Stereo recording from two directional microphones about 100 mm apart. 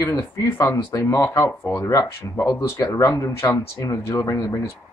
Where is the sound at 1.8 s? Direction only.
30° left (ahead or behind).